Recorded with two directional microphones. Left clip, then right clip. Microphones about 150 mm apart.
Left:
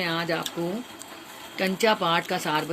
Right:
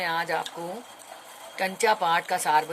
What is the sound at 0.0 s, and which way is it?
Speech, 45° right (ahead or behind).